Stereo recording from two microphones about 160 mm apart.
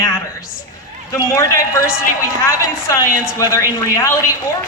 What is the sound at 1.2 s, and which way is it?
Speech, 20° left (ahead or behind).